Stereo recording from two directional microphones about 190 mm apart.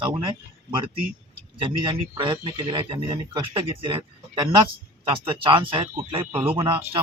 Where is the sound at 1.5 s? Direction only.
25° right (ahead or behind).